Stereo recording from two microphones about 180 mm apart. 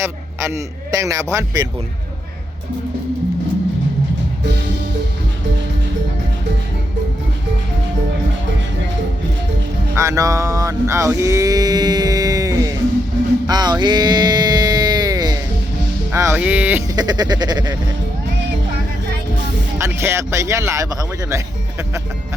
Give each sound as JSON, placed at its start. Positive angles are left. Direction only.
{"t": 0.0, "sound": "a man's voice", "side_deg": -15}
{"t": 9.9, "sound": "a sound", "side_deg": -15}
{"t": 16.1, "sound": "a man's voice", "side_deg": -10}
{"t": 16.9, "sound": "music", "side_deg": -20}
{"t": 19.8, "sound": "a man's voice", "side_deg": -15}